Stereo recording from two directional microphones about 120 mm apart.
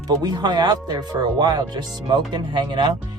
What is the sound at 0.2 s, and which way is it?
Speech, 35° right (ahead or behind).